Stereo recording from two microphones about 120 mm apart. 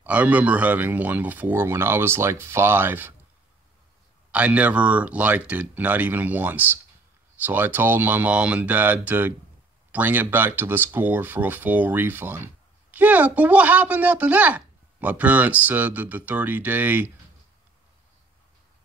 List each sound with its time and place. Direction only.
0.0 s speech: 10° right (ahead or behind)
4.3 s speech: 10° right (ahead or behind)